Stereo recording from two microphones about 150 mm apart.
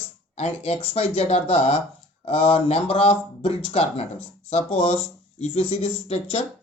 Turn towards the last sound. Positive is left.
turn(degrees=45)  # may be behind; listen again after turning